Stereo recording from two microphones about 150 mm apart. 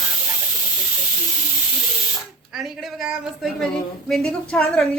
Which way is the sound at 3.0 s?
Centre (ahead or behind).